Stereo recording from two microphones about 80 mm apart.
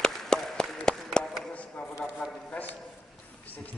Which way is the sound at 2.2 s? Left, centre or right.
Centre.